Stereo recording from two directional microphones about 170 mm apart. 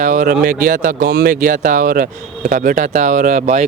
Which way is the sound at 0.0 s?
50° right (ahead or behind).